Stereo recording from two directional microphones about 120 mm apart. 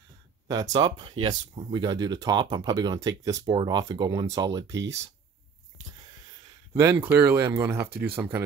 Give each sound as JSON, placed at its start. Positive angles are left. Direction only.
{"t": 0.5, "sound": "speech", "side_deg": -35}
{"t": 6.8, "sound": "speech", "side_deg": -20}